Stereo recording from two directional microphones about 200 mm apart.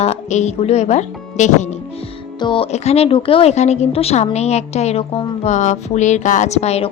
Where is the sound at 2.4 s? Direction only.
25° left (ahead or behind).